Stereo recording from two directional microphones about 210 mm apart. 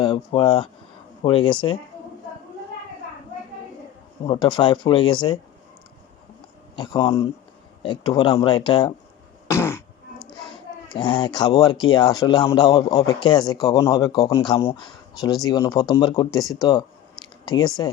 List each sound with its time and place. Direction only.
0.0 s speech: 25° left (ahead or behind)
4.3 s speech: 20° left (ahead or behind)
6.7 s speech: 20° left (ahead or behind)
9.5 s throat clearing: 10° left (ahead or behind)
10.9 s speech: 25° left (ahead or behind)
14.8 s speech: centre (ahead or behind)
15.4 s speech: 15° left (ahead or behind)
17.4 s a sound: 20° left (ahead or behind)